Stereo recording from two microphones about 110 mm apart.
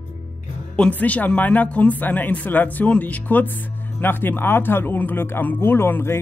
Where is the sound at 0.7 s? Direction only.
15° left (ahead or behind).